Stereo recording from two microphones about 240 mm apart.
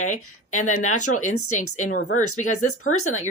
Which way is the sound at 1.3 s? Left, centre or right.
Left.